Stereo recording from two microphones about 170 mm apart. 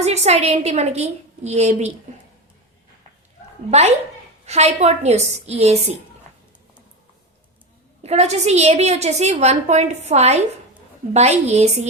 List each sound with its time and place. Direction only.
0.0 s a woman's voice: 40° right (ahead or behind)
3.7 s a woman's voice: 40° right (ahead or behind)
8.0 s a woman's voice: 40° right (ahead or behind)